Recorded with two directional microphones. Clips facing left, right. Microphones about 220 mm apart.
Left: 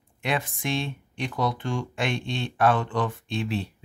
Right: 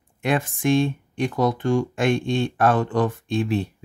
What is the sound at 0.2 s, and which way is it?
Speech, 50° right (ahead or behind).